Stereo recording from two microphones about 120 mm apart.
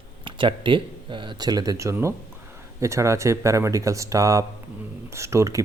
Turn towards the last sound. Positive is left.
turn(degrees=-25)  # may be behind; listen again after turning